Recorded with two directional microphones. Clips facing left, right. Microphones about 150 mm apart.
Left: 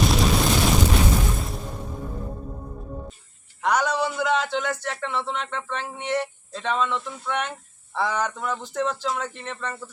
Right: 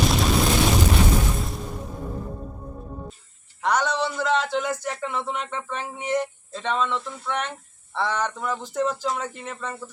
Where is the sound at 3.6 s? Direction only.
5° left (ahead or behind).